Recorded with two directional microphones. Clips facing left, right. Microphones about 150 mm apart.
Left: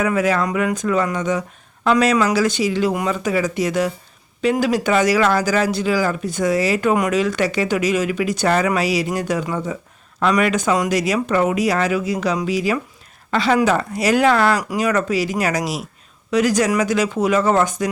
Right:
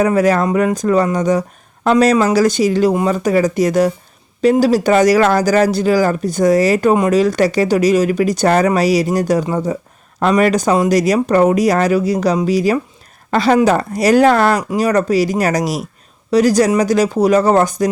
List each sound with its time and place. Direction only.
0.0 s speech: 40° right (ahead or behind)
6.9 s speech: 30° right (ahead or behind)